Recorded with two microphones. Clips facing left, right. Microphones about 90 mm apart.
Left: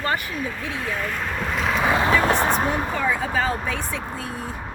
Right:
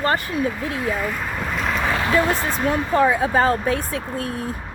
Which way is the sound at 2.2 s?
35° left (ahead or behind).